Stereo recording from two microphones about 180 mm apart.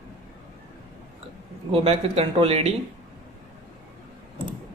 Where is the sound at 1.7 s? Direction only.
35° right (ahead or behind).